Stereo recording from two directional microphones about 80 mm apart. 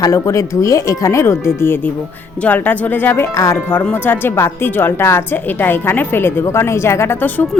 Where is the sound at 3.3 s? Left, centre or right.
Left.